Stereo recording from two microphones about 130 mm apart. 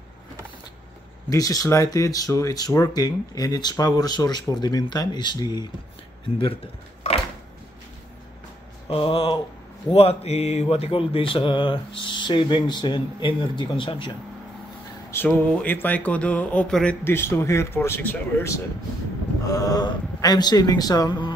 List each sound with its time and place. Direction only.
1.3 s speech: 25° left (ahead or behind)
8.8 s a sound: 45° left (ahead or behind)
9.9 s mantra: 55° left (ahead or behind)
10.7 s speech: 45° left (ahead or behind)
15.0 s speech: 15° left (ahead or behind)
17.1 s speech: 20° left (ahead or behind)